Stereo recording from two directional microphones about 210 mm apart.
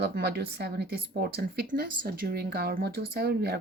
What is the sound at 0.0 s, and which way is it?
Speech, 50° right (ahead or behind).